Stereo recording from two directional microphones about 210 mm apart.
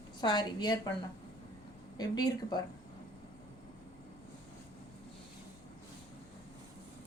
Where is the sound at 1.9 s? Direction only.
20° left (ahead or behind).